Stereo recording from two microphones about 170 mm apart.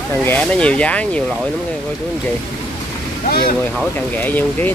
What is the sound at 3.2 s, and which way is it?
Speech, 60° left (ahead or behind).